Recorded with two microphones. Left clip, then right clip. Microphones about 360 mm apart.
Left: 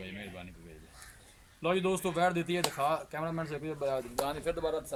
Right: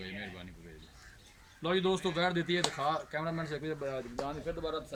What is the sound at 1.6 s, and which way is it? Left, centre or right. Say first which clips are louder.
Speech: left 1 dB; centre.